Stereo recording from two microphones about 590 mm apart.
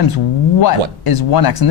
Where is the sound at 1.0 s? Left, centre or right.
Left.